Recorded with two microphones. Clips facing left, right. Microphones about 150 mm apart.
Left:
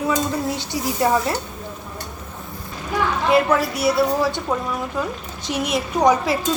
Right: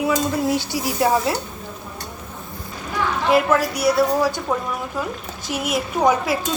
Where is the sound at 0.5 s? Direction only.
5° right (ahead or behind).